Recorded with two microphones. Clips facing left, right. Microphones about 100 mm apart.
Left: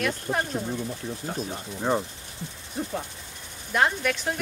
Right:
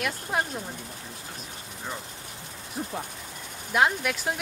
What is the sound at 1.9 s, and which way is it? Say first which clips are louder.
Speech: left 12 dB; 75° left (ahead or behind).